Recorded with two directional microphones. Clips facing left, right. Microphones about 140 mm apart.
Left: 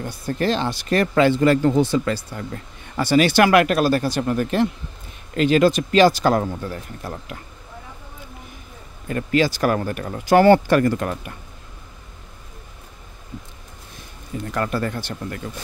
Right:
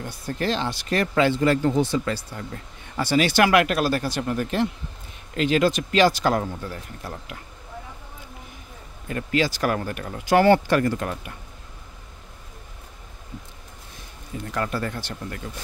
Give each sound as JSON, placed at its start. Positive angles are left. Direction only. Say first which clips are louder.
{"t": 0.0, "sound": "speech", "louder": "left 4 dB", "side_deg": 45}
{"t": 9.0, "sound": "speech", "louder": "left 4 dB", "side_deg": 45}
{"t": 14.5, "sound": "speech", "louder": "left 3 dB", "side_deg": 50}